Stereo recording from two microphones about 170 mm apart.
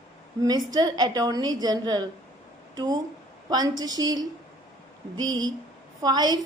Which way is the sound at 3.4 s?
25° right (ahead or behind).